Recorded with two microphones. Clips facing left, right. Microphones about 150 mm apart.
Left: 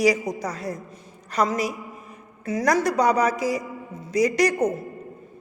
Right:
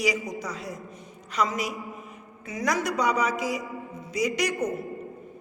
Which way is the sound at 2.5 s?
40° left (ahead or behind).